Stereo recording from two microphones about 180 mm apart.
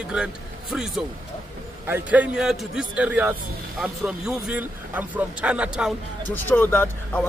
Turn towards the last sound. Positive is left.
turn(degrees=10)  # may be behind; listen again after turning